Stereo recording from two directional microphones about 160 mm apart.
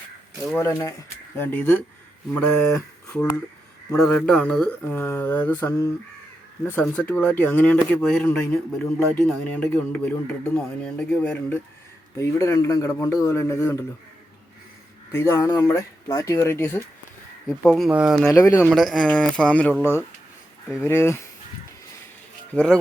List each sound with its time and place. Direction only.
0.5 s speech: 15° left (ahead or behind)
12.1 s a man's voice: 20° left (ahead or behind)
15.1 s a man's voice: 15° left (ahead or behind); by 18.3 s 5° right (ahead or behind)
18.3 s speech: 15° left (ahead or behind)
18.7 s speech: centre (ahead or behind)
22.5 s speech: 5° left (ahead or behind)